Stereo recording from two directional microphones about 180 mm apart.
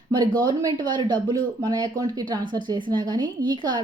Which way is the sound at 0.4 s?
25° right (ahead or behind).